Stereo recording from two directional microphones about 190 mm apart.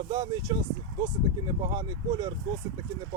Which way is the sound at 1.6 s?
20° right (ahead or behind).